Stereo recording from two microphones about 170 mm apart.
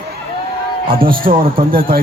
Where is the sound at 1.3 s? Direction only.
60° right (ahead or behind).